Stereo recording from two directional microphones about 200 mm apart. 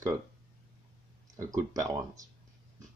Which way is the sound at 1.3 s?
15° right (ahead or behind).